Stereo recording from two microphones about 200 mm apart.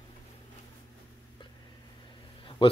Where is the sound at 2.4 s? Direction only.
25° left (ahead or behind).